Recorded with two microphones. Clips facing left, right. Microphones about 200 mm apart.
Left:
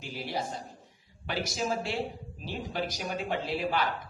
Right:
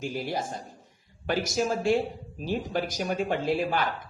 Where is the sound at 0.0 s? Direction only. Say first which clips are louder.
Right 4 dB; 50° right (ahead or behind).